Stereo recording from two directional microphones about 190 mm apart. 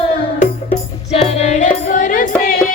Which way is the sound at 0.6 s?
30° left (ahead or behind).